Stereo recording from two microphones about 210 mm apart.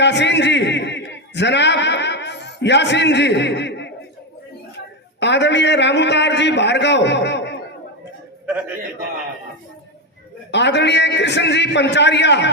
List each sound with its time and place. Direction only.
0.0 s a man's voice: 55° left (ahead or behind)
5.2 s a man's voice: 55° left (ahead or behind)
10.5 s a man's voice: 55° left (ahead or behind)